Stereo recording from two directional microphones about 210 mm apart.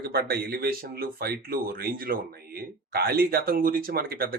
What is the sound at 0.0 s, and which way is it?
Speech, 45° right (ahead or behind).